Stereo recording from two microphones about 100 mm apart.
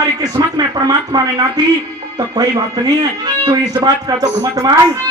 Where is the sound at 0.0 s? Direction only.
40° right (ahead or behind).